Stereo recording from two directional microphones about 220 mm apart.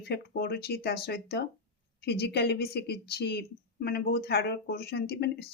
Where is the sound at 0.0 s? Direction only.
45° left (ahead or behind).